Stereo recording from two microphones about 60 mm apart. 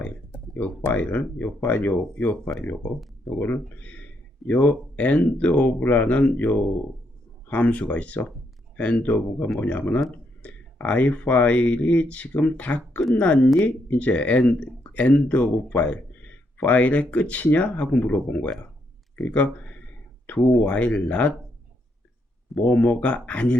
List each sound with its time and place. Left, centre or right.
0.0 s a sound: left
0.9 s speech: left
20.4 s speech: centre
20.7 s speech: left
22.5 s speech: left